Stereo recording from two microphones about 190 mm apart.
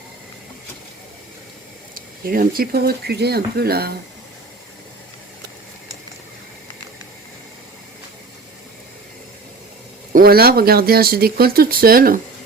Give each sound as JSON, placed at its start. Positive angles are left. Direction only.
{"t": 2.0, "sound": "speech", "side_deg": -50}
{"t": 10.1, "sound": "speech", "side_deg": -50}